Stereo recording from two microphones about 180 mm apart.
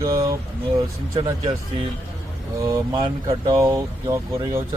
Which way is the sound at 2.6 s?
25° right (ahead or behind).